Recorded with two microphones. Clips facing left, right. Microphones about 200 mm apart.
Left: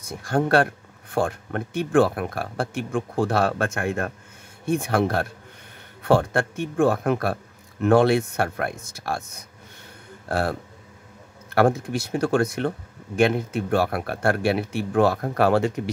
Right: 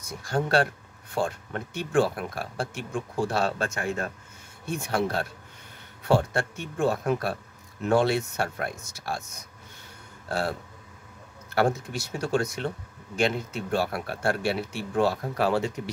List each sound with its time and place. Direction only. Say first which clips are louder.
0.1 s speech: left 5 dB; 55° left (ahead or behind)
10.2 s speech: left 4 dB; 55° left (ahead or behind)
11.5 s speech: left 5 dB; 55° left (ahead or behind)